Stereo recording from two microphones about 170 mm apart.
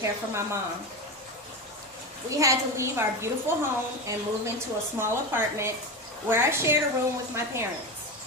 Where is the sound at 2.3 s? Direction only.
20° right (ahead or behind).